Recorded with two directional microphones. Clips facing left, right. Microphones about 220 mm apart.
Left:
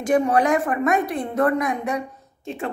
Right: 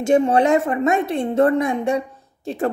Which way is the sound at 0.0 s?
25° right (ahead or behind).